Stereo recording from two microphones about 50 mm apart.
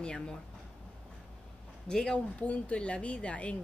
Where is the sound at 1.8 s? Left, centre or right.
Centre.